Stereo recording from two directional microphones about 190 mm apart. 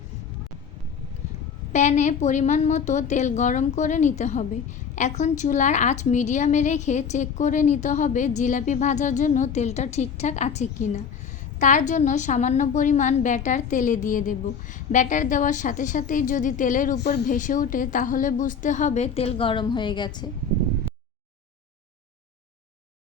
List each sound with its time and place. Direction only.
1.7 s a woman's voice: 40° left (ahead or behind)
17.0 s speech: 60° left (ahead or behind)
17.2 s a woman's voice: 40° left (ahead or behind); by 20.2 s 25° left (ahead or behind)